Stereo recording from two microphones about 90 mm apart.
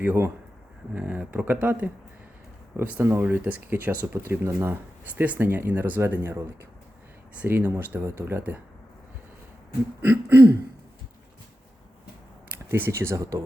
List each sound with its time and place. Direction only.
0.0 s speech: 25° right (ahead or behind)
3.0 s speech: 30° right (ahead or behind)
3.2 s speech: 20° right (ahead or behind)
5.0 s speech: 15° right (ahead or behind)
10.0 s speech: 25° right (ahead or behind)
12.6 s speech: 25° right (ahead or behind)